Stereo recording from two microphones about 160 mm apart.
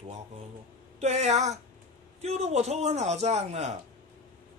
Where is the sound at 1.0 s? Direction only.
45° right (ahead or behind).